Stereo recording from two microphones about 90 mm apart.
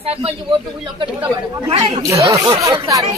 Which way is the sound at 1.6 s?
90° right.